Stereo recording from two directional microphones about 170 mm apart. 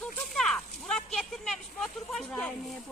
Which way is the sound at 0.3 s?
5° left (ahead or behind).